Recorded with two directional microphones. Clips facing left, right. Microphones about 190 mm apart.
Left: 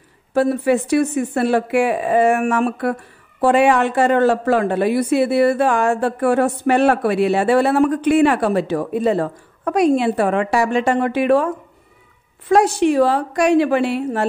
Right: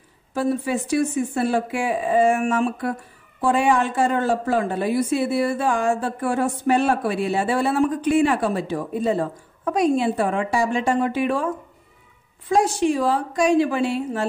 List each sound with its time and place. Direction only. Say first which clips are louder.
0.3 s speech: left 6 dB; 65° left (ahead or behind)